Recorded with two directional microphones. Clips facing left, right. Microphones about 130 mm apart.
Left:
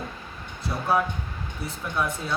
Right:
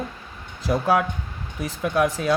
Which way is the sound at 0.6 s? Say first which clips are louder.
Right 4 dB; 90° right.